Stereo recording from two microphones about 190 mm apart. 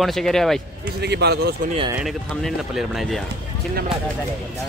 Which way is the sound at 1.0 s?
60° right (ahead or behind).